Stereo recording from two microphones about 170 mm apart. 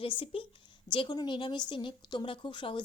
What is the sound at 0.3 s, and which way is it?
A woman's voice, 35° left (ahead or behind).